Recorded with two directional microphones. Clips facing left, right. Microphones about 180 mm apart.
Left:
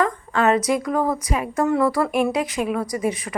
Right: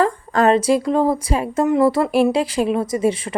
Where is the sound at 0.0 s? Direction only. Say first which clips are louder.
Right 4 dB; 35° right (ahead or behind).